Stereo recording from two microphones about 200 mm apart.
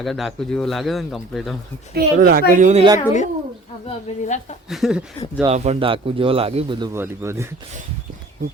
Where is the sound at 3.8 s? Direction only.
35° left (ahead or behind).